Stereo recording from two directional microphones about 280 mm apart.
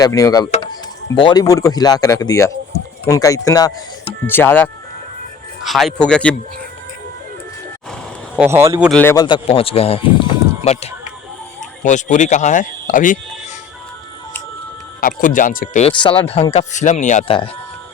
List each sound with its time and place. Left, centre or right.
0.0 s speech: centre
8.4 s speech: centre
8.9 s speech: centre; by 13.1 s left
15.0 s speech: left